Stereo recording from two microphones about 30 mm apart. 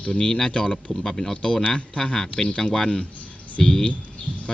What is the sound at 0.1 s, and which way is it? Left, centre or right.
Speech, left.